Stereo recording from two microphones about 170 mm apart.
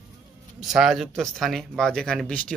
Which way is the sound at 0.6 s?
Centre (ahead or behind).